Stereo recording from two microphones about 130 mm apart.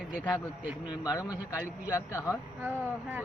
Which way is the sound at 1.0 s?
30° left (ahead or behind).